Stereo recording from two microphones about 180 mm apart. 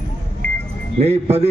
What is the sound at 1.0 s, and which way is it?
Speech, 35° right (ahead or behind).